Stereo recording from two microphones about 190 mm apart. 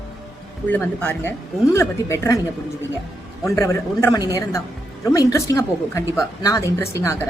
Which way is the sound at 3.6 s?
15° left (ahead or behind).